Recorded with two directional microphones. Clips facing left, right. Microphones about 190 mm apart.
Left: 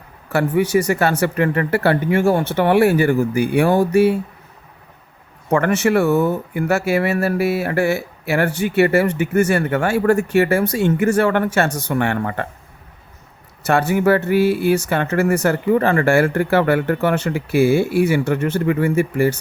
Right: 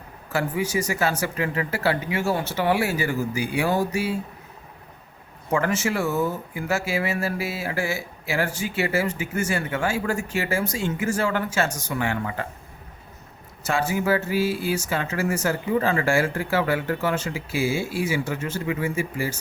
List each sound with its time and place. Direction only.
0.3 s speech: 65° left (ahead or behind)
5.5 s speech: 65° left (ahead or behind)
13.7 s speech: 65° left (ahead or behind)